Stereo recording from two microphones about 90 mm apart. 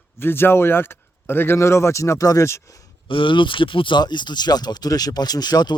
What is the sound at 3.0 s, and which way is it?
Speech, 70° left (ahead or behind).